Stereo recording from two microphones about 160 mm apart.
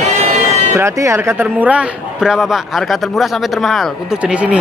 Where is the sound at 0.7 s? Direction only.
20° right (ahead or behind).